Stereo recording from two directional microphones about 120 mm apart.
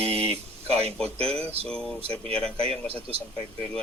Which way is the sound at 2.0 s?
55° right (ahead or behind).